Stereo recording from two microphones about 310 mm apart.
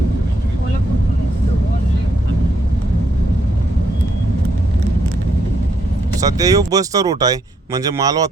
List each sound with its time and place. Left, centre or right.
6.1 s speech: centre